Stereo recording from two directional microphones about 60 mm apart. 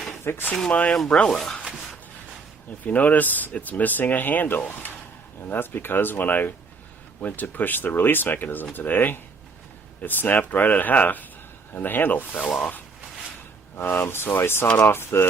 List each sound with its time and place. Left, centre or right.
0.3 s speech: left
0.7 s speech: left
0.9 s speech: centre
1.8 s a sound: centre
2.8 s speech: left
13.7 s speech: left